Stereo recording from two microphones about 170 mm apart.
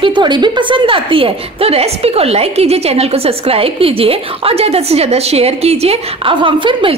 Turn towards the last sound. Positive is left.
turn(degrees=-30)  # may be behind; listen again after turning